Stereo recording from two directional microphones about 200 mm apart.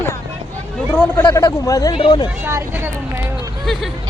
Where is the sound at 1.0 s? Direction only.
15° left (ahead or behind).